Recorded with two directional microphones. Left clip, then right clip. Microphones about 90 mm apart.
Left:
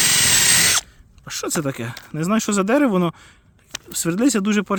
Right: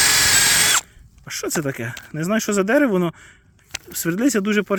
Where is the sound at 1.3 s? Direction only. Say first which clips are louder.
Even; 35° left (ahead or behind).